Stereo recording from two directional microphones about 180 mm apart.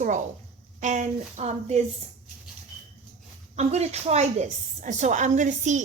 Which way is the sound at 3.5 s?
35° right (ahead or behind).